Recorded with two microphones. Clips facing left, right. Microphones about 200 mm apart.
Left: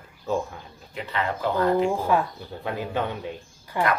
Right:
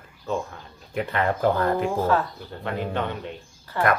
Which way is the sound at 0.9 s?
50° right (ahead or behind).